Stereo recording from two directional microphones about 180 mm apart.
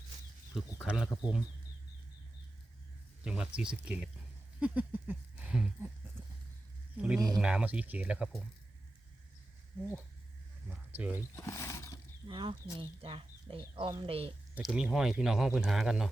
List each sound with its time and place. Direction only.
0.5 s speech: 5° right (ahead or behind)
3.2 s speech: 5° right (ahead or behind)
4.6 s a sound: 10° right (ahead or behind)
6.9 s speech: 5° right (ahead or behind)
10.7 s speech: 10° right (ahead or behind)
11.3 s roaring cats: 15° left (ahead or behind)
12.3 s speech: 25° right (ahead or behind)
14.5 s speech: 5° right (ahead or behind)